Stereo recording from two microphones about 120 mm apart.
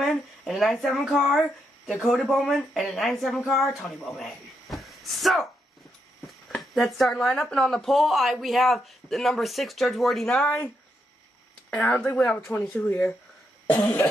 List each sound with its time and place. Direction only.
0.0 s speech: centre (ahead or behind)
4.2 s a sound: centre (ahead or behind)
6.2 s speech: centre (ahead or behind)
11.7 s speech: 10° left (ahead or behind)